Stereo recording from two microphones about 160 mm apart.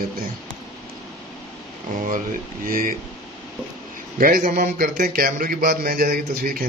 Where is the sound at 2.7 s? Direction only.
60° right (ahead or behind).